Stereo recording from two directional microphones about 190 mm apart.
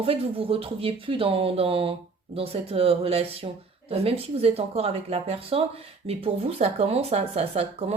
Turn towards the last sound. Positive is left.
turn(degrees=-35)  # may be behind; listen again after turning